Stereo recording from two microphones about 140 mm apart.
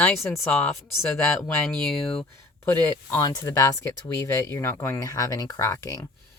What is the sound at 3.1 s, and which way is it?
Speech, 25° left (ahead or behind).